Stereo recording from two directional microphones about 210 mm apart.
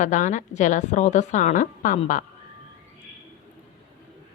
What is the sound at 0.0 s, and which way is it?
A woman's voice, 35° left (ahead or behind).